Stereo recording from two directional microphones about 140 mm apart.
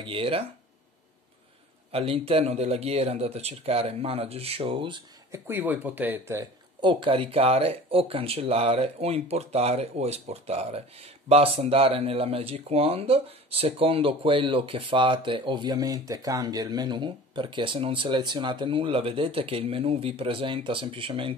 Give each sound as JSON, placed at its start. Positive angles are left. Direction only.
{"t": 0.0, "sound": "speech", "side_deg": -40}
{"t": 1.9, "sound": "speech", "side_deg": -45}
{"t": 5.3, "sound": "speech", "side_deg": -15}
{"t": 6.8, "sound": "speech", "side_deg": -40}